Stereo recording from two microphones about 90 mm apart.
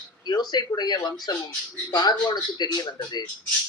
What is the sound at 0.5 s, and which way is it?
Speech, 50° left (ahead or behind).